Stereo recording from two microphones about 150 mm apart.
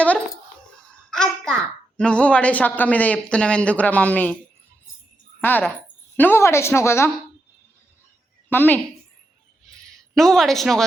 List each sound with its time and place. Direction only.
1.1 s a child's voice: 5° left (ahead or behind)
5.4 s a woman's voice: 10° left (ahead or behind)
8.4 s a woman's voice: 15° left (ahead or behind)
9.9 s a woman's voice: centre (ahead or behind)